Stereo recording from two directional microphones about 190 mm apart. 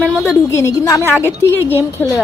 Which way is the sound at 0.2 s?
15° left (ahead or behind).